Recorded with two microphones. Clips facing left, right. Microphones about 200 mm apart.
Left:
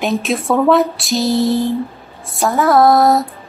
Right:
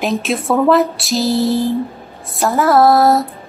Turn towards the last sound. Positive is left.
turn(degrees=0)  # may be behind; listen again after turning